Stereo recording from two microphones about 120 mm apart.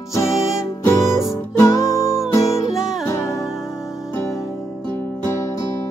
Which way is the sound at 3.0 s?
25° left (ahead or behind).